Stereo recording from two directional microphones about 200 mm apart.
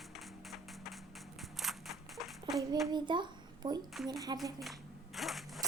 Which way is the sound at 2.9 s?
20° right (ahead or behind).